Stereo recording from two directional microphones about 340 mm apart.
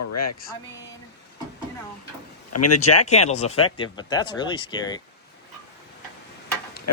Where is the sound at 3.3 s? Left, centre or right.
Centre.